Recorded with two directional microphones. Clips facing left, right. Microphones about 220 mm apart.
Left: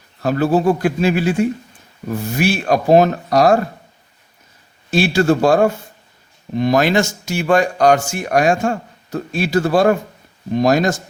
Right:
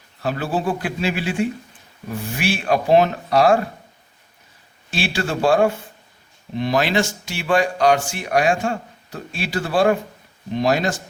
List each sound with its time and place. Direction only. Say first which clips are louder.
0.2 s speech: left 7 dB; 40° left (ahead or behind)
4.9 s speech: left 9 dB; 40° left (ahead or behind)